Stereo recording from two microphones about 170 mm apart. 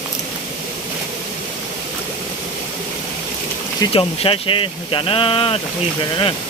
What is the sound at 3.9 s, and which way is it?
Speech, 35° left (ahead or behind).